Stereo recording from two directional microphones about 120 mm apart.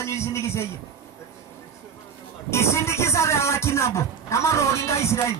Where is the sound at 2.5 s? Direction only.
20° left (ahead or behind).